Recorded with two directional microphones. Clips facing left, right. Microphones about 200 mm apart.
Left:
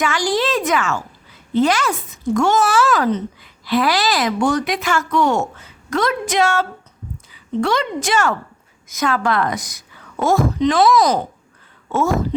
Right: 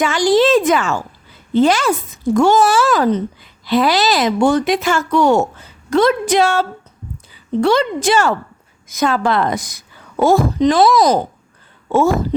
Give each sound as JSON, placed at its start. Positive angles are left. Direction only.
{"t": 0.0, "sound": "a woman's voice", "side_deg": -25}